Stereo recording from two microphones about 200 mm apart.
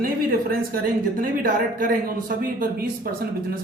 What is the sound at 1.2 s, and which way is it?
A man's voice, 45° right (ahead or behind).